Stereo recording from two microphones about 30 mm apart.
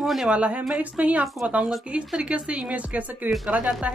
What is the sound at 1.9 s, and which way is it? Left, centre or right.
Speech, right.